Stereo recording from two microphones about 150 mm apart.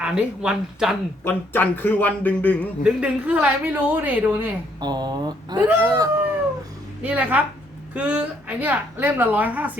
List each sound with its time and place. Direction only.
0.0 s speech: 5° right (ahead or behind)
1.2 s speech: 15° left (ahead or behind)
2.8 s a woman's voice: 5° right (ahead or behind)
4.8 s speech: 30° right (ahead or behind)
5.5 s a woman's voice: 15° right (ahead or behind)